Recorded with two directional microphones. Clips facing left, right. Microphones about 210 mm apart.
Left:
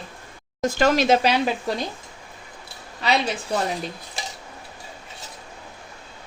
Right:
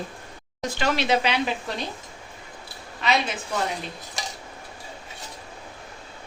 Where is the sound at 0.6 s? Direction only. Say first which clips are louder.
Left 6 dB; 45° left (ahead or behind).